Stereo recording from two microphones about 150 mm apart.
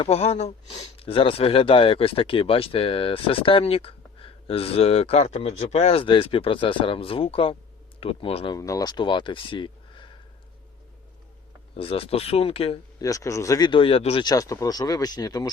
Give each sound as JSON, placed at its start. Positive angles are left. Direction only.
{"t": 0.0, "sound": "speech", "side_deg": 45}
{"t": 8.5, "sound": "speech", "side_deg": 20}
{"t": 11.8, "sound": "speech", "side_deg": 40}
{"t": 13.0, "sound": "speech", "side_deg": 20}
{"t": 14.3, "sound": "speech", "side_deg": 20}